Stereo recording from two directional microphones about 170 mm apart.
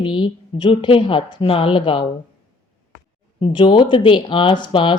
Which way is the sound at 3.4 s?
25° left (ahead or behind).